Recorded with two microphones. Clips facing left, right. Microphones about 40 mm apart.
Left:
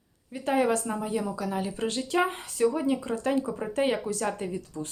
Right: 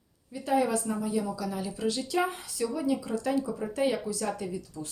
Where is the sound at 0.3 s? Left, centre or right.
Left.